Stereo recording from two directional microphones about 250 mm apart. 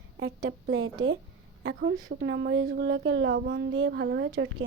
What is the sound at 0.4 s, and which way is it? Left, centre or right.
Speech, right.